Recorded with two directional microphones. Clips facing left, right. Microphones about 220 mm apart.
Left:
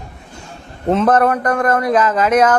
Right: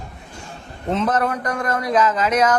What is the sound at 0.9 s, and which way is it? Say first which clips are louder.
A man's voice: left 7 dB; 55° left (ahead or behind).